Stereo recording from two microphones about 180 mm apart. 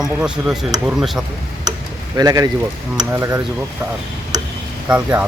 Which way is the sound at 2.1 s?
20° right (ahead or behind).